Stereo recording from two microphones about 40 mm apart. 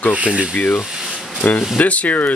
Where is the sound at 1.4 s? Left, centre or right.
Left.